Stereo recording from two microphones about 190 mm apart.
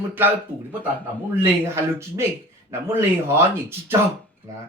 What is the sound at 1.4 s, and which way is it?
Speech, 15° right (ahead or behind).